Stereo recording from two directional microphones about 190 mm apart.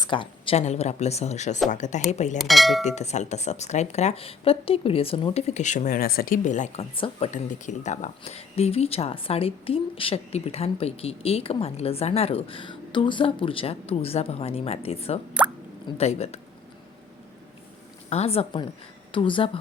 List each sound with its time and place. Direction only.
0.0 s speech: 25° left (ahead or behind)
2.4 s speech: centre (ahead or behind)
2.8 s speech: 35° left (ahead or behind)
6.9 s a woman's voice: 30° left (ahead or behind)
7.3 s speech: 40° left (ahead or behind)
18.1 s a woman's voice: 30° left (ahead or behind)